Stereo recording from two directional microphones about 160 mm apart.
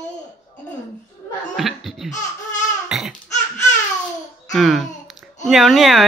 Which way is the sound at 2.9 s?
Centre (ahead or behind).